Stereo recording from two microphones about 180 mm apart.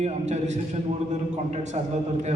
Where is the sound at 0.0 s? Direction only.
40° right (ahead or behind).